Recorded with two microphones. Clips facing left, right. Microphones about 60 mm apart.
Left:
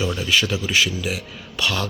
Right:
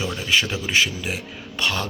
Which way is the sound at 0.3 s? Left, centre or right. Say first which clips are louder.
Right 2 dB; right.